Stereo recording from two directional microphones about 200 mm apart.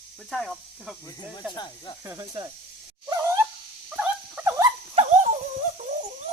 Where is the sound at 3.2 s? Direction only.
15° right (ahead or behind).